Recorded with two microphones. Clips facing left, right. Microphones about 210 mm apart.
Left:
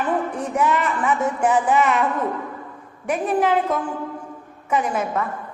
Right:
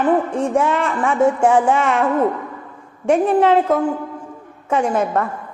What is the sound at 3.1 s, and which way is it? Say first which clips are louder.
Speech: right 6 dB; 30° right (ahead or behind).